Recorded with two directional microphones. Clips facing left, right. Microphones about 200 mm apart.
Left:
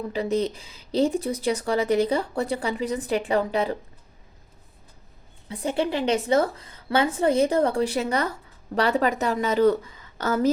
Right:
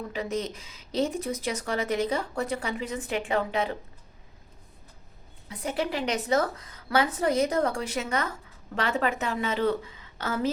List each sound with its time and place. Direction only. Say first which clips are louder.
0.1 s speech: left 8 dB; 35° left (ahead or behind)
5.5 s a woman's voice: left 4 dB; 30° left (ahead or behind)